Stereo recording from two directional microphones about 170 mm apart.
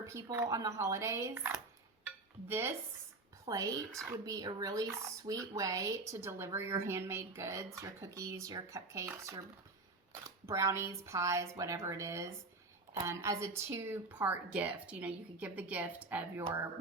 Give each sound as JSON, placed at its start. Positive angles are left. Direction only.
{"t": 0.0, "sound": "speech", "side_deg": -15}
{"t": 2.0, "sound": "dishes", "side_deg": -15}
{"t": 3.4, "sound": "speech", "side_deg": -20}